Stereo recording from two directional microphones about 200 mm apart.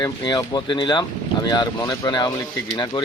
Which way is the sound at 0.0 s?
20° left (ahead or behind).